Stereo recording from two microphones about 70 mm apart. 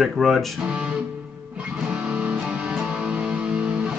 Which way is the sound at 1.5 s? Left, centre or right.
Centre.